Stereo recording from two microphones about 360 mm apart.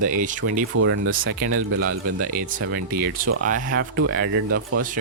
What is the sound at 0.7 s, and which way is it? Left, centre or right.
Speech, right.